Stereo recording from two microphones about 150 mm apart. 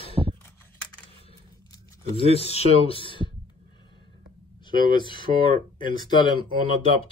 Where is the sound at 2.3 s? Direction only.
40° left (ahead or behind).